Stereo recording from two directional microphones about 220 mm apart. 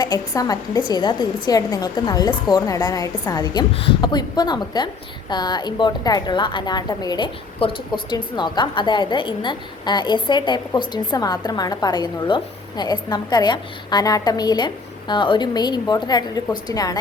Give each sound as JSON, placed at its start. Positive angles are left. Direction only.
{"t": 0.0, "sound": "a woman's voice", "side_deg": 15}